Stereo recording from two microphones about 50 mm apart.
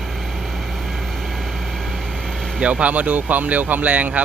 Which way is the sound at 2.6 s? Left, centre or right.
Right.